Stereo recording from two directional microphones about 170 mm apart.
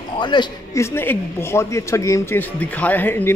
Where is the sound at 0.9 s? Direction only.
15° left (ahead or behind).